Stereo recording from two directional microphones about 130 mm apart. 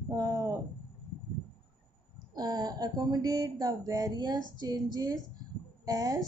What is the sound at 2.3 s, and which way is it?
A woman's voice, 30° right (ahead or behind).